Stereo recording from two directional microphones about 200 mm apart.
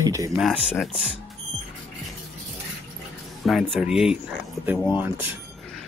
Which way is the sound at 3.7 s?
5° right (ahead or behind).